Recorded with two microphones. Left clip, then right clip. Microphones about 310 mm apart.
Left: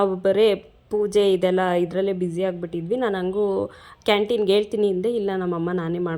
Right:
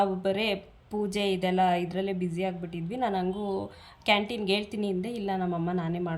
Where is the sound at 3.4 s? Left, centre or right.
Left.